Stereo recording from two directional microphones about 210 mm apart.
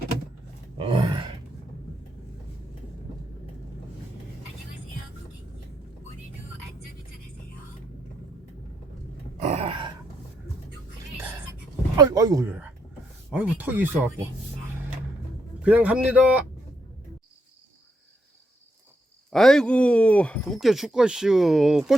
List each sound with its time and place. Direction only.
0.8 s grunt: 25° right (ahead or behind)
9.4 s a sound: 30° right (ahead or behind)
11.9 s speech: 20° right (ahead or behind)
15.6 s speech: 5° right (ahead or behind)
19.3 s speech: centre (ahead or behind)